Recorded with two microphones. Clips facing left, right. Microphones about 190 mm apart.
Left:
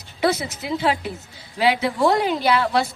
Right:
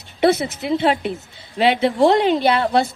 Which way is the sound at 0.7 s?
25° right (ahead or behind).